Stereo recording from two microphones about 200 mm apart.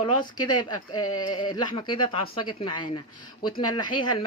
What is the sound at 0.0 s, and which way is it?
Speech, 20° left (ahead or behind).